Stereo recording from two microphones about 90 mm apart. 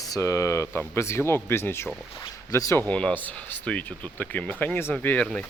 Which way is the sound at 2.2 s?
40° left (ahead or behind).